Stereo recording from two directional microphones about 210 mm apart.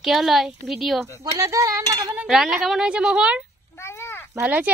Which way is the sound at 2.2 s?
Centre (ahead or behind).